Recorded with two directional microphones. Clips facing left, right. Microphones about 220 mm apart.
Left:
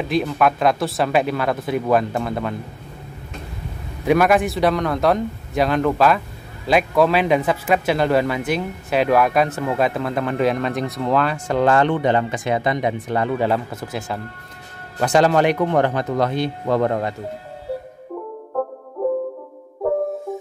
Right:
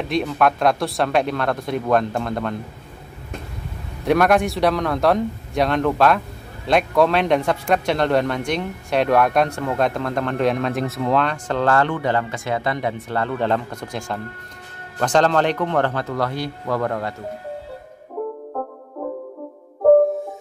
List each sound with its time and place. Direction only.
0.0 s speech: centre (ahead or behind)
4.0 s speech: centre (ahead or behind); by 17.1 s 20° left (ahead or behind)